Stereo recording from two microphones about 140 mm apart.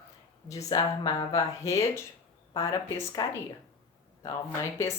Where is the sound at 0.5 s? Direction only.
30° left (ahead or behind).